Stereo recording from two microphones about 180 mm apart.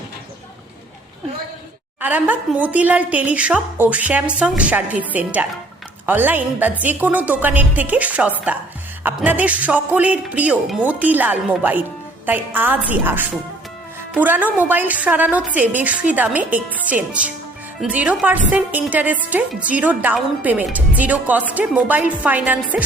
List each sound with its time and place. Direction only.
2.0 s speech: 10° right (ahead or behind)